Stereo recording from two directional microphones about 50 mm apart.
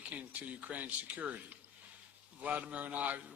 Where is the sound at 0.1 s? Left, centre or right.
Right.